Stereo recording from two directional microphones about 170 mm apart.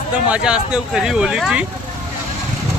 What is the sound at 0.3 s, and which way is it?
Speech, 5° right (ahead or behind).